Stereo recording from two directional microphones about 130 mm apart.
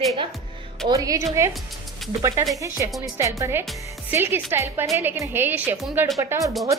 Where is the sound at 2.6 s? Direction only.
25° right (ahead or behind).